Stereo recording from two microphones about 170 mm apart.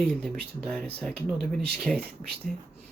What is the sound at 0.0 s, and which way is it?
Speech, 5° left (ahead or behind).